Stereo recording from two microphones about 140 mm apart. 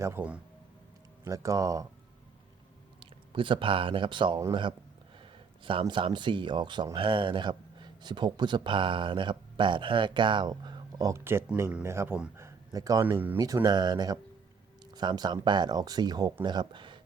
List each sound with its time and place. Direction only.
0.0 s speech: 15° right (ahead or behind)
3.0 s speech: 35° right (ahead or behind); by 12.3 s 10° right (ahead or behind)
12.4 s speech: 20° right (ahead or behind)
13.4 s speech: 30° right (ahead or behind)